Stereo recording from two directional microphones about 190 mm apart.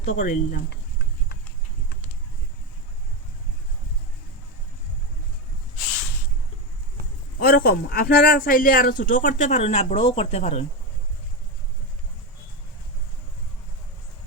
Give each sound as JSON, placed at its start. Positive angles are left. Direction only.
{"t": 0.0, "sound": "speech", "side_deg": 40}
{"t": 0.7, "sound": "a sound", "side_deg": 60}
{"t": 7.3, "sound": "speech", "side_deg": 50}